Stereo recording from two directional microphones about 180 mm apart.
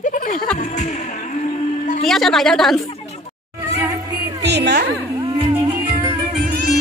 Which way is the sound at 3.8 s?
20° right (ahead or behind).